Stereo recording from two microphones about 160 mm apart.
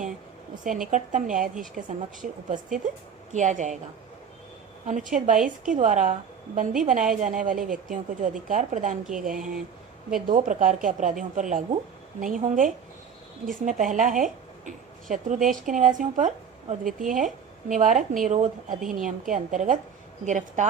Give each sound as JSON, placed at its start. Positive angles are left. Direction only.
{"t": 0.9, "sound": "a woman's voice", "side_deg": -50}
{"t": 4.9, "sound": "a woman's voice", "side_deg": -55}